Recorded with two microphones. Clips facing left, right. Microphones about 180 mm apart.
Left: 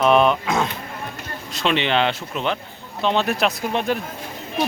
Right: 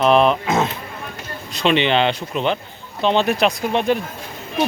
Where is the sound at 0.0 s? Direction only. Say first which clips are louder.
Right 1 dB; centre (ahead or behind).